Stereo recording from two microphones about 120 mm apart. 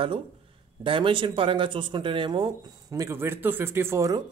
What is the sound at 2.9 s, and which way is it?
Speech, 25° right (ahead or behind).